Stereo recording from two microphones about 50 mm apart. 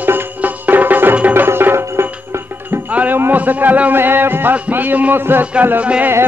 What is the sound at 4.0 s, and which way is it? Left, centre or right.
Music, right.